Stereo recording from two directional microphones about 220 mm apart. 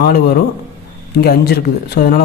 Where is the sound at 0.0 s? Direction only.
45° left (ahead or behind).